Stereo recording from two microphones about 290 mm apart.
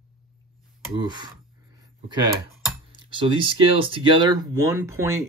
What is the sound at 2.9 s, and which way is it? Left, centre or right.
Speech, centre.